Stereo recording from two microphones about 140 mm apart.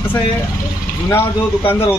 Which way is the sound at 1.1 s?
15° left (ahead or behind).